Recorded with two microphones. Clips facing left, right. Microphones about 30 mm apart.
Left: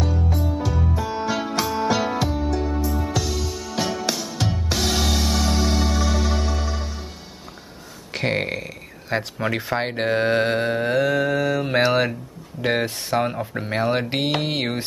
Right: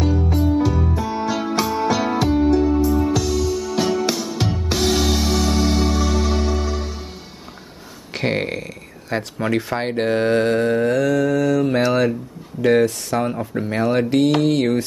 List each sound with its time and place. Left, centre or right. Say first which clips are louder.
0.3 s music: right 6 dB; centre
0.6 s music: right 5 dB; centre
2.3 s music: right 9 dB; centre
2.6 s music: right 8 dB; centre
8.1 s speech: right 2 dB; centre; by 14.0 s left
14.0 s mantra: right 7 dB; left
14.4 s speech: right 7 dB; left